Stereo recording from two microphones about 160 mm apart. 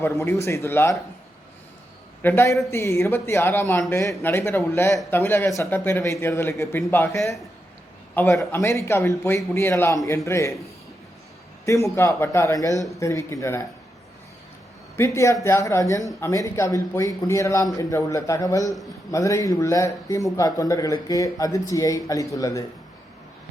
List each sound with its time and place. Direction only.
0.0 s a man's voice: 20° left (ahead or behind)
2.2 s a man's voice: 15° left (ahead or behind)
11.6 s speech: 20° left (ahead or behind)
14.9 s a man's voice: 15° left (ahead or behind)